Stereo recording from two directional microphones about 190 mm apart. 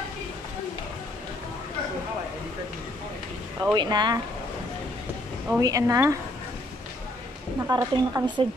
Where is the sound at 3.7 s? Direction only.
25° right (ahead or behind).